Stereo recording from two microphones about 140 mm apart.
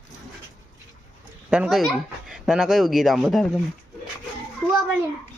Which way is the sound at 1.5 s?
5° right (ahead or behind).